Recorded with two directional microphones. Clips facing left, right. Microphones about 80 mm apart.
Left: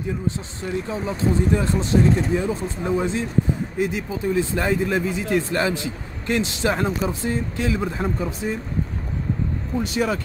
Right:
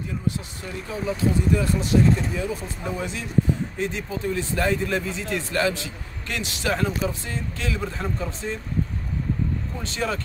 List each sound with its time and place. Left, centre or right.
0.8 s speech: left
3.7 s speech: centre
9.8 s speech: centre